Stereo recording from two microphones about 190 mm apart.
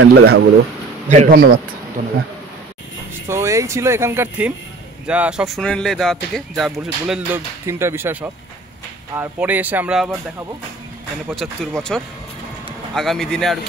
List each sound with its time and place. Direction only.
0.0 s speech: 60° right (ahead or behind)
1.0 s a man's voice: 40° right (ahead or behind)
3.3 s speech: 15° right (ahead or behind)
11.3 s speech: centre (ahead or behind)